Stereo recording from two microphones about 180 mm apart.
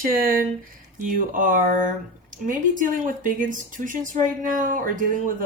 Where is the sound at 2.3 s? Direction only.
45° right (ahead or behind).